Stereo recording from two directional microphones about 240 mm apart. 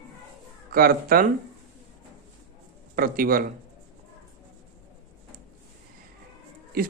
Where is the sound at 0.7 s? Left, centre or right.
Right.